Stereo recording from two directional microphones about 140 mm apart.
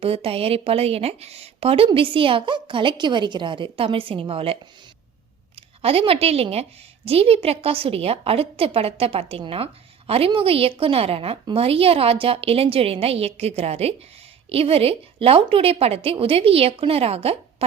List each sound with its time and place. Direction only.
0.0 s speech: 45° right (ahead or behind)
5.5 s a woman's voice: 45° right (ahead or behind)